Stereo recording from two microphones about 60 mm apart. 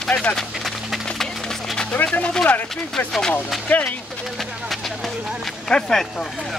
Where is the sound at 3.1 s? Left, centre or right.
Centre.